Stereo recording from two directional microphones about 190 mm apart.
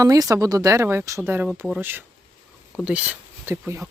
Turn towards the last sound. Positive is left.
turn(degrees=-15)  # may be behind; listen again after turning